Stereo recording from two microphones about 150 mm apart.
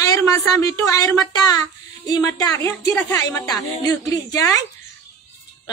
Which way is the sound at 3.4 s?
25° left (ahead or behind).